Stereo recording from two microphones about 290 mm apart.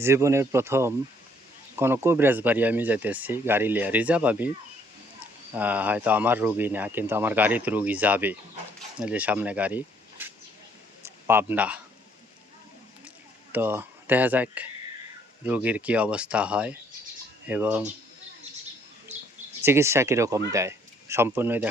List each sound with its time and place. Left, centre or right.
0.0 s speech: centre
5.5 s speech: centre
13.5 s speech: centre
19.1 s bird: right
19.6 s speech: centre